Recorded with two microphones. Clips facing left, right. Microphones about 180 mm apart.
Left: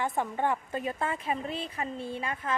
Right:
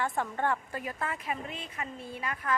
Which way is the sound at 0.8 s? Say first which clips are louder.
Left 4 dB; 25° left (ahead or behind).